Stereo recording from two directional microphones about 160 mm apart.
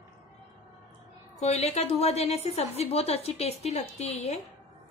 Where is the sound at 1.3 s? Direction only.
40° left (ahead or behind).